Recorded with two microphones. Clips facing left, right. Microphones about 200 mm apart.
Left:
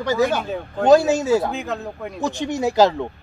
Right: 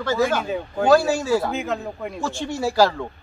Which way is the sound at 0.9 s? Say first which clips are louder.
Left 3 dB; 20° left (ahead or behind).